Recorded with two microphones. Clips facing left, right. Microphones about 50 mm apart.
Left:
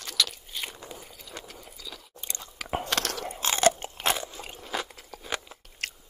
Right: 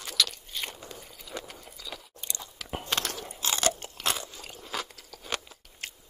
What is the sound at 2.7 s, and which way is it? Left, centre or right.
Biting, left.